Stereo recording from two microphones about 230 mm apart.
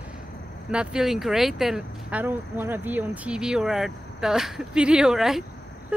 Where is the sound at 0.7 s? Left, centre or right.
Centre.